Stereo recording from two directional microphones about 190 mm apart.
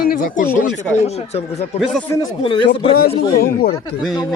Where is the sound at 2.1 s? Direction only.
25° left (ahead or behind).